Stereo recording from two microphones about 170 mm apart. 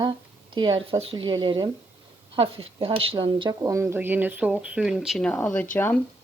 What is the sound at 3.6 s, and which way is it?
A woman's voice, 15° right (ahead or behind).